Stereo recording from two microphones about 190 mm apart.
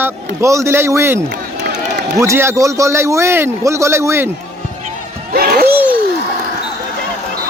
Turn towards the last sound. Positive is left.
turn(degrees=-10)  # may be behind; listen again after turning